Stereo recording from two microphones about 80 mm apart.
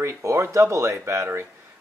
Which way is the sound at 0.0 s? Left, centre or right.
Right.